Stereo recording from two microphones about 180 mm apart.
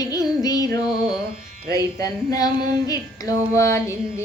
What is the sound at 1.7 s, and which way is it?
Female singing, 20° left (ahead or behind).